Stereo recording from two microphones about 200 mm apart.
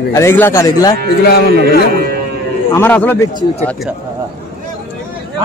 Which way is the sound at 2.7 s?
10° left (ahead or behind).